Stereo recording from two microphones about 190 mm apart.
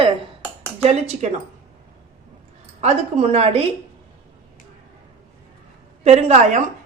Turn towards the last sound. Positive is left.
turn(degrees=-35)  # may be behind; listen again after turning